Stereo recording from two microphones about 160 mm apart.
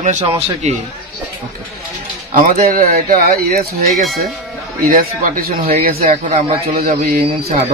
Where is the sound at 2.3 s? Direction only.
55° right (ahead or behind).